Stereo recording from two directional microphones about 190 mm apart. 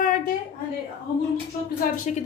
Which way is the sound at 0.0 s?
45° left (ahead or behind).